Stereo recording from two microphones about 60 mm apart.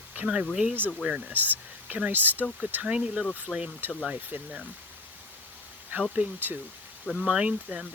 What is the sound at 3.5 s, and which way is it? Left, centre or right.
Speech, centre.